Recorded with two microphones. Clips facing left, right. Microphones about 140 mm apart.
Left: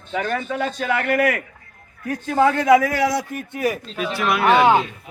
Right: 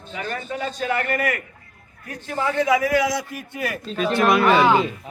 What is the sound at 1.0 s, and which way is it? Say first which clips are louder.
Speech: left 4 dB; 85° left.